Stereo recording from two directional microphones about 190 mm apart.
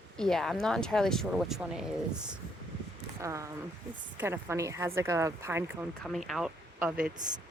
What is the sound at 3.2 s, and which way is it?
Speech, 15° right (ahead or behind).